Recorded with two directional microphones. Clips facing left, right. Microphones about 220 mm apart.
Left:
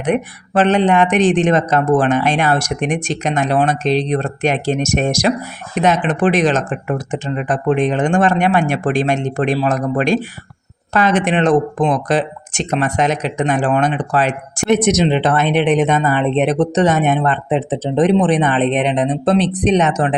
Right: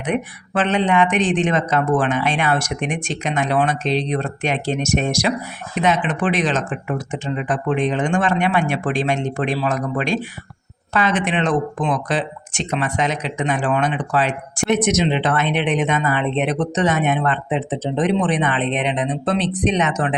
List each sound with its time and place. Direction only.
0.0 s speech: 40° left (ahead or behind)